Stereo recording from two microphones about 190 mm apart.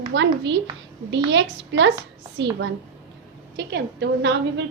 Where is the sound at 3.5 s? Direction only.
60° right (ahead or behind).